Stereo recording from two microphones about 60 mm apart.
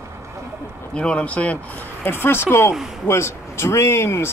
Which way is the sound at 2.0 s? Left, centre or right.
Left.